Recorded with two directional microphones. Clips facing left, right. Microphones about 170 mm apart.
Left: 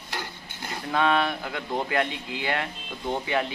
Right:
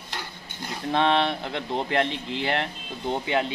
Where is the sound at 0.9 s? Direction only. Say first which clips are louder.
Right 1 dB; 25° right (ahead or behind).